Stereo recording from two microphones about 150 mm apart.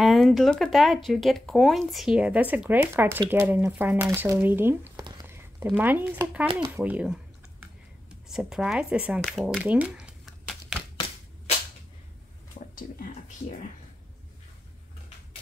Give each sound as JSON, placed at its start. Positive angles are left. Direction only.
{"t": 0.0, "sound": "speech", "side_deg": 0}
{"t": 5.2, "sound": "a sound", "side_deg": -15}
{"t": 5.7, "sound": "speech", "side_deg": -10}
{"t": 10.4, "sound": "typewriter", "side_deg": 0}
{"t": 12.7, "sound": "speech", "side_deg": 65}